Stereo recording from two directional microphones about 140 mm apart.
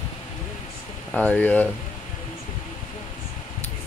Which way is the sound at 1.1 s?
10° left (ahead or behind).